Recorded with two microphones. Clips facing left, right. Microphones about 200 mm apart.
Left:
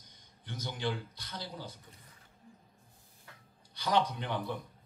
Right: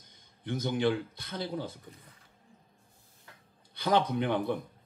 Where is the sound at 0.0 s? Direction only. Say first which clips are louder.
Right 13 dB; 55° right (ahead or behind).